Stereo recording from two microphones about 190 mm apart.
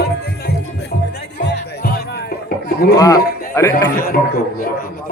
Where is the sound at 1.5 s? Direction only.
55° left (ahead or behind).